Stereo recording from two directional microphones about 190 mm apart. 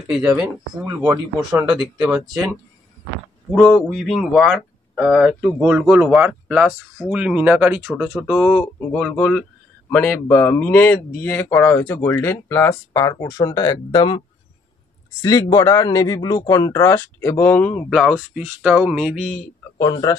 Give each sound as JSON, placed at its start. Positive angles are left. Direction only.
{"t": 0.4, "sound": "speech", "side_deg": -5}
{"t": 2.0, "sound": "speech", "side_deg": -20}
{"t": 3.5, "sound": "speech", "side_deg": 0}
{"t": 15.2, "sound": "a man's voice", "side_deg": 20}
{"t": 19.8, "sound": "speech", "side_deg": 20}